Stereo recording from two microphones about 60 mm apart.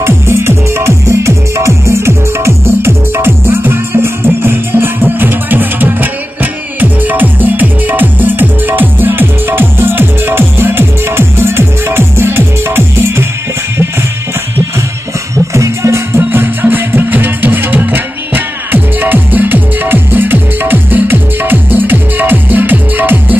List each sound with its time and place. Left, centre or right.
0.0 s music: right
15.5 s music: right
16.2 s music: right